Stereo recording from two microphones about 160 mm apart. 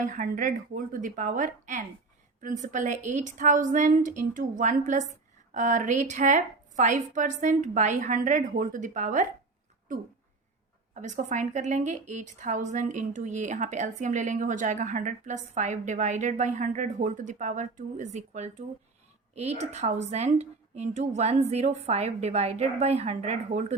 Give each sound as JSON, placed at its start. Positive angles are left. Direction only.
{"t": 0.0, "sound": "a woman's voice", "side_deg": -55}
{"t": 10.9, "sound": "a woman's voice", "side_deg": -50}